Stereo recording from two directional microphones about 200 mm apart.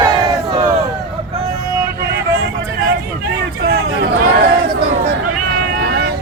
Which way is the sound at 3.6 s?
50° right (ahead or behind).